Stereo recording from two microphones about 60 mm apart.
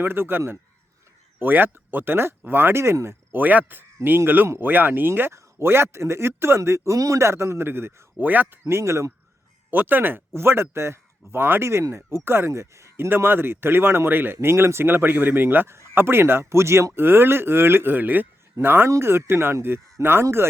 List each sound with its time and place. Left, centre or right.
0.0 s speech: right
2.8 s speech: right
3.3 s speech: right
6.6 s speech: right
8.2 s speech: right
8.7 s speech: right
9.6 s speech: right
12.5 s speech: right
13.1 s speech: right
14.4 s speech: right
16.9 s speech: right